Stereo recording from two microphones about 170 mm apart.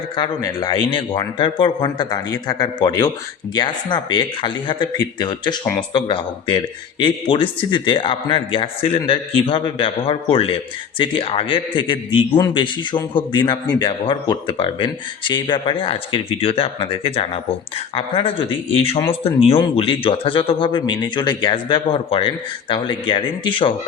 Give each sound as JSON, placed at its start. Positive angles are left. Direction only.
{"t": 0.2, "sound": "a man's voice", "side_deg": 25}